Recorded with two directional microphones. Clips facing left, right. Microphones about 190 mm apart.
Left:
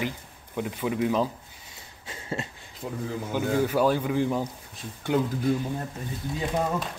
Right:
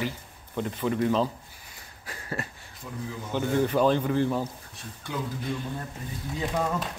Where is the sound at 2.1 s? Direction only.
25° left (ahead or behind).